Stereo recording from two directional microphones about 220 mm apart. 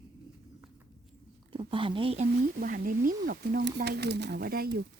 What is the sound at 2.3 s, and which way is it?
Speech, 40° right (ahead or behind).